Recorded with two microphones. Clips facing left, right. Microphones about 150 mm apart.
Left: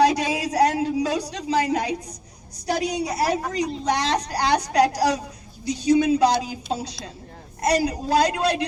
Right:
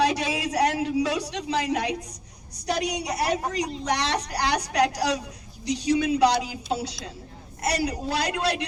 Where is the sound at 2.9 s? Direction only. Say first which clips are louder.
Left 3 dB; 30° left (ahead or behind).